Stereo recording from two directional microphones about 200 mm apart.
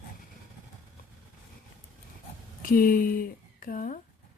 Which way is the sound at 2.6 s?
45° left (ahead or behind).